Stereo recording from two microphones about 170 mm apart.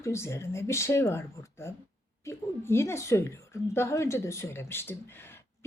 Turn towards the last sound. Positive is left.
turn(degrees=15)  # may be behind; listen again after turning